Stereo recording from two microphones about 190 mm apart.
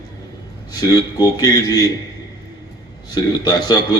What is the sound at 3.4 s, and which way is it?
Speech, 20° left (ahead or behind).